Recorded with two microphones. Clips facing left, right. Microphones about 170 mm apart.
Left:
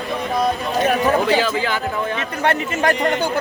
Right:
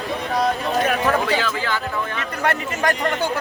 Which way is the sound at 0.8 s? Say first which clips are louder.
Left 4 dB; 25° left (ahead or behind).